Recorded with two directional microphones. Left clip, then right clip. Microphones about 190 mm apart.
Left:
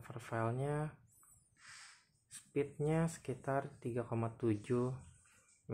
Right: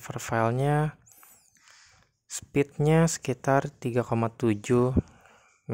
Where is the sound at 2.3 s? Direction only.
50° right (ahead or behind).